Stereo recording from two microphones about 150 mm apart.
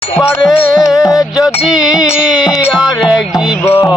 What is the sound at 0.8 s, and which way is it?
Music, 20° left (ahead or behind).